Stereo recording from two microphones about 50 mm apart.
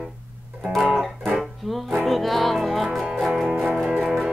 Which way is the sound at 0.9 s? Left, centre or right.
Centre.